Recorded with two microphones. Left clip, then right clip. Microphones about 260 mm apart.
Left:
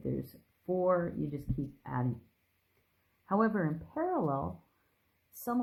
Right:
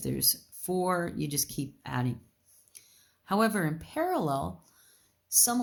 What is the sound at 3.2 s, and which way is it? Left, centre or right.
Speech, right.